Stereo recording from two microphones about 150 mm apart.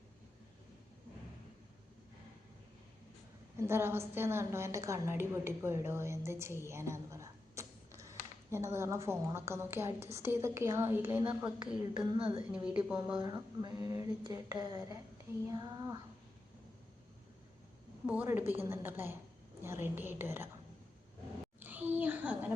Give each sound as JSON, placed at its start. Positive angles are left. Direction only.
{"t": 3.6, "sound": "a woman's voice", "side_deg": -15}
{"t": 11.9, "sound": "a woman's voice", "side_deg": -30}
{"t": 12.6, "sound": "a woman's voice", "side_deg": -10}
{"t": 13.1, "sound": "a sound", "side_deg": -25}
{"t": 18.0, "sound": "a woman's voice", "side_deg": -10}
{"t": 21.6, "sound": "a sound", "side_deg": -10}